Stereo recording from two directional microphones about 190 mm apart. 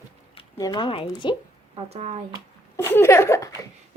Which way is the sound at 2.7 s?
10° left (ahead or behind).